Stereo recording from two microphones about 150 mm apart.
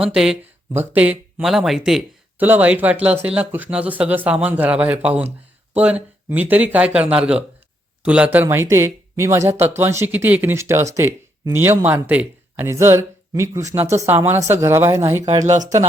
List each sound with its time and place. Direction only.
0.0 s speech: 5° right (ahead or behind)